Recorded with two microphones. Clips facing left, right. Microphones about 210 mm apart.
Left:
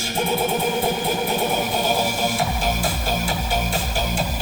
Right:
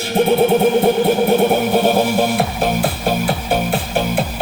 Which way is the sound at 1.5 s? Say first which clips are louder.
Right 8 dB; 60° right (ahead or behind).